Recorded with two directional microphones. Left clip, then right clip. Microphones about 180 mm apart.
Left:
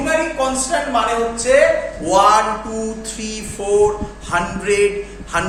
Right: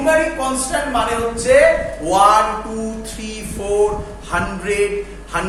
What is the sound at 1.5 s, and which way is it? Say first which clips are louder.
Speech: right 2 dB; 15° left (ahead or behind).